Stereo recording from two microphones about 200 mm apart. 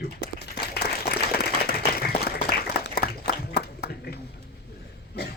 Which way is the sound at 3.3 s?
55° left (ahead or behind).